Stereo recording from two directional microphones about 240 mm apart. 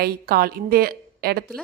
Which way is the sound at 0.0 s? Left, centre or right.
Right.